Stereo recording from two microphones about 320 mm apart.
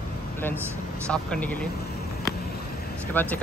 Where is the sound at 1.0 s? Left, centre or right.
Centre.